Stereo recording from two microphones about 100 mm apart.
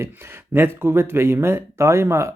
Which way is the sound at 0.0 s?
25° right (ahead or behind).